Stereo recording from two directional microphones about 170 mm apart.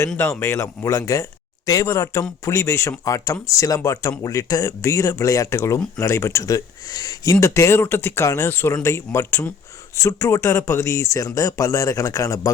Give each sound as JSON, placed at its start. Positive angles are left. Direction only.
{"t": 0.2, "sound": "speech", "side_deg": 15}